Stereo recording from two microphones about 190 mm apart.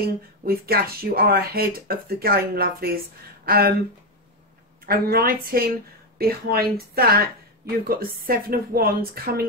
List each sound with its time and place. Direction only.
0.5 s speech: 55° right (ahead or behind)
4.8 s speech: 50° right (ahead or behind)